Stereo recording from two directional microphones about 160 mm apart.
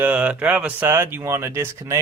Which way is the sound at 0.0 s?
10° right (ahead or behind).